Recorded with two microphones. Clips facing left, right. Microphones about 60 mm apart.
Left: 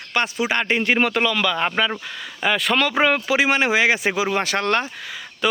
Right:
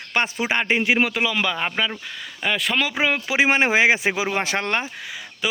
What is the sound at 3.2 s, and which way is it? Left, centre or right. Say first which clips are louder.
Speech: even; right.